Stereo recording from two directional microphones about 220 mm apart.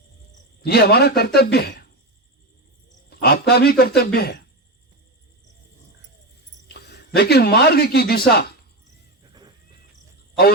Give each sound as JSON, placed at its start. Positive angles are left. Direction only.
{"t": 0.6, "sound": "speech", "side_deg": 45}
{"t": 3.1, "sound": "speech", "side_deg": 45}
{"t": 6.7, "sound": "speech", "side_deg": 45}